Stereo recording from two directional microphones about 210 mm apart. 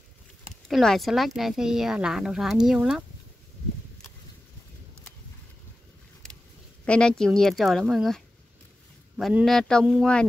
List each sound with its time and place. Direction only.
0.7 s speech: centre (ahead or behind)
6.8 s speech: 5° left (ahead or behind)